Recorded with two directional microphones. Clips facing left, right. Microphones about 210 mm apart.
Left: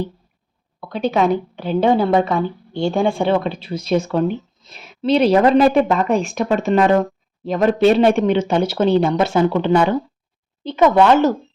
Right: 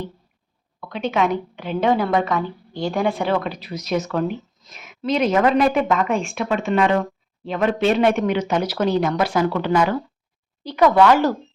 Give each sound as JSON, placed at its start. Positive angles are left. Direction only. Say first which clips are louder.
{"t": 0.8, "sound": "a woman's voice", "louder": "left 3 dB", "side_deg": 35}